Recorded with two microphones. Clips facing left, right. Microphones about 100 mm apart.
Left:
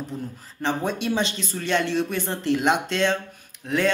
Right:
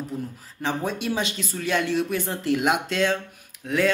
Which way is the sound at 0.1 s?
5° right (ahead or behind).